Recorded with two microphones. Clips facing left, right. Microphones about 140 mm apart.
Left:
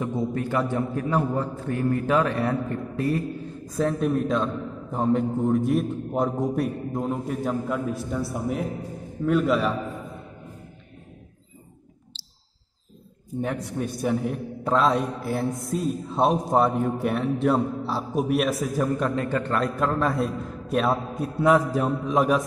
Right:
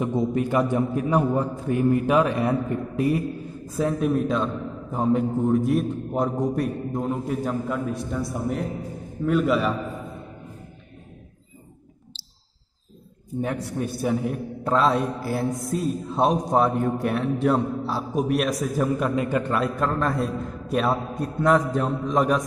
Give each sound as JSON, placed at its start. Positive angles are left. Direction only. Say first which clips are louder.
{"t": 0.0, "sound": "a man's voice", "louder": "right 3 dB", "side_deg": -20}
{"t": 13.4, "sound": "a man's voice", "louder": "right 1 dB", "side_deg": 0}